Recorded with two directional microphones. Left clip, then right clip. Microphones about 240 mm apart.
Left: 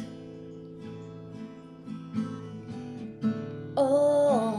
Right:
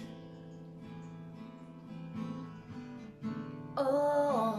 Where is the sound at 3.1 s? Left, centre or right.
Left.